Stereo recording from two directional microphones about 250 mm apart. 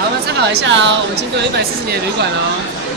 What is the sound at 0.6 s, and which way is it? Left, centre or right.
Speech, right.